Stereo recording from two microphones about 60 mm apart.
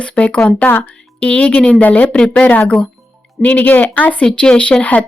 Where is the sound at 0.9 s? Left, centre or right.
Centre.